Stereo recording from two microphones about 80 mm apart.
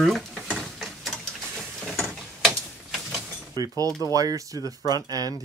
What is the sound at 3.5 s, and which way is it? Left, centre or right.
Speech, right.